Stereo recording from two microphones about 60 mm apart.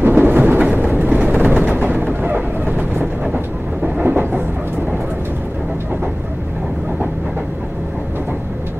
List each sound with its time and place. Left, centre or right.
0.0 s a sound: right
0.7 s vehicle: right
4.0 s train: right